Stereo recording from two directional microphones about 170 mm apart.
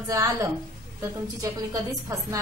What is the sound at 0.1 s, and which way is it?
A woman's voice, 20° right (ahead or behind).